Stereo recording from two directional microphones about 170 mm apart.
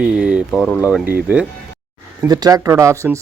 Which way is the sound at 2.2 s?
25° right (ahead or behind).